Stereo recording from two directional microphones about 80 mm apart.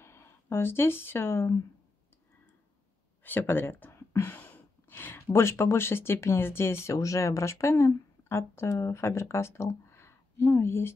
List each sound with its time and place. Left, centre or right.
0.0 s speech: left
3.3 s speech: left